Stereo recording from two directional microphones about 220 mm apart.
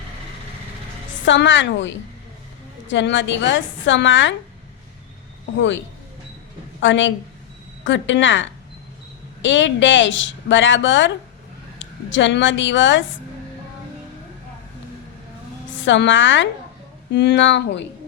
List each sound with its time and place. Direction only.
1.2 s a woman's voice: 55° left (ahead or behind)
5.5 s a woman's voice: 55° left (ahead or behind)
15.7 s speech: 55° left (ahead or behind)